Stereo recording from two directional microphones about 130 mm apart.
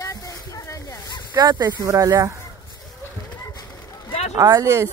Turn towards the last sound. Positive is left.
turn(degrees=-25)  # may be behind; listen again after turning